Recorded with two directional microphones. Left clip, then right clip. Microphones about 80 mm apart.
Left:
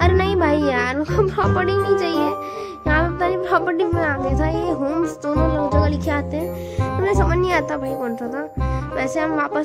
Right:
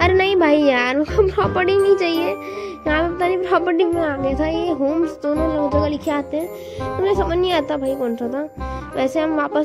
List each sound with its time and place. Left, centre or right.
0.0 s music: right
3.9 s a woman's voice: centre
4.2 s music: right
4.8 s music: centre
7.0 s speech: centre
7.5 s speech: right